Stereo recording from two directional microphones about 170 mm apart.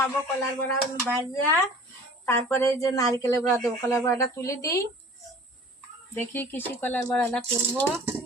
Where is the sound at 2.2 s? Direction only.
15° left (ahead or behind).